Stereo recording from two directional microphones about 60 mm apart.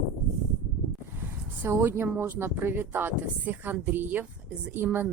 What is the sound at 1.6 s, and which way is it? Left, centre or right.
A woman's voice, right.